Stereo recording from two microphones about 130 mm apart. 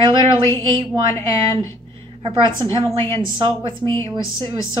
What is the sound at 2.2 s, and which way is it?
Speech, 40° right (ahead or behind).